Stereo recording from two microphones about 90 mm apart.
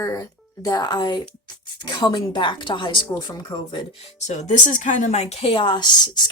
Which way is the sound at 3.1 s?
45° left (ahead or behind).